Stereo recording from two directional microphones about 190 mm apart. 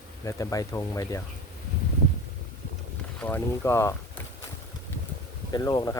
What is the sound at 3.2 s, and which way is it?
Speech, 10° left (ahead or behind).